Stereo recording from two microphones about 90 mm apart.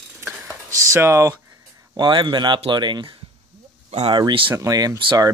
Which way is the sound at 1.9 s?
60° right (ahead or behind).